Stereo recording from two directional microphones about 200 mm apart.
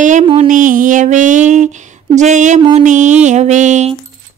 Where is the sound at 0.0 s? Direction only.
35° right (ahead or behind).